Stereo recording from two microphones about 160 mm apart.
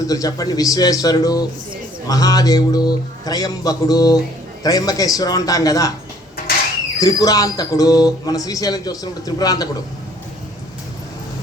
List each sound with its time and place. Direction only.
0.1 s speech: 20° left (ahead or behind)
7.0 s speech: 20° left (ahead or behind)